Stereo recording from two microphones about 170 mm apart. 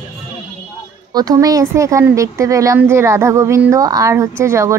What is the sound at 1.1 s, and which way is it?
Speech, 20° right (ahead or behind).